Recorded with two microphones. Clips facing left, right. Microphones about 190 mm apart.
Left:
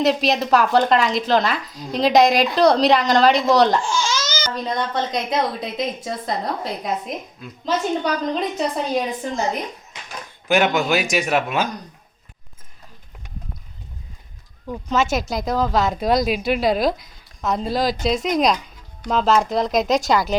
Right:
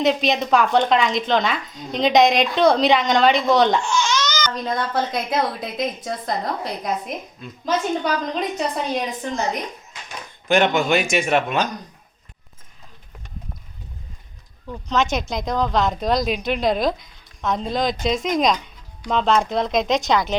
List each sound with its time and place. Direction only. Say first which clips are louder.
0.0 s a woman's voice: left 1 dB; centre (ahead or behind)
3.8 s speech: right 1 dB; 30° left (ahead or behind)
4.5 s a woman's voice: left 2 dB; centre (ahead or behind)
10.5 s a woman's voice: right 1 dB; 5° left (ahead or behind)
14.7 s a woman's voice: left 1 dB; 10° left (ahead or behind)